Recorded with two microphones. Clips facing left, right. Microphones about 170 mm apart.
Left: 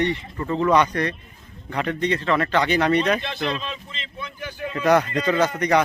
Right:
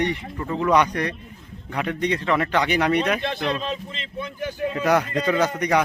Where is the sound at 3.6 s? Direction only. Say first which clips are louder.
Right 5 dB; 45° right (ahead or behind).